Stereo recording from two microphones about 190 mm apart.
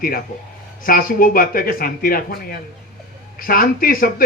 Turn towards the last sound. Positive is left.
turn(degrees=50)  # may be behind; listen again after turning